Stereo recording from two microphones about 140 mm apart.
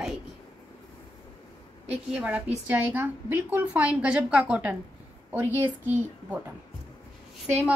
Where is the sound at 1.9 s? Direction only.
10° right (ahead or behind).